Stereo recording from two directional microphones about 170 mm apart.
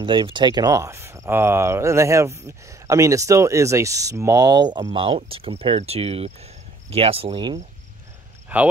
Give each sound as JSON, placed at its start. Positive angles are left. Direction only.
{"t": 0.0, "sound": "speech", "side_deg": -30}
{"t": 8.5, "sound": "speech", "side_deg": -10}